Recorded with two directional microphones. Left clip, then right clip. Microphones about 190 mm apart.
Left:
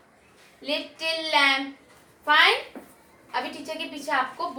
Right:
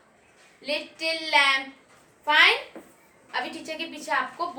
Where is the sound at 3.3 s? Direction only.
20° right (ahead or behind).